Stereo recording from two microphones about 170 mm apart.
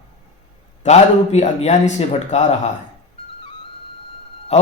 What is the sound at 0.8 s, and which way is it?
Speech, 40° left (ahead or behind).